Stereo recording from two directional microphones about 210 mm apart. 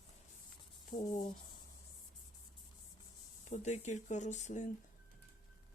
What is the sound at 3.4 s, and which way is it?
Speech, 35° left (ahead or behind).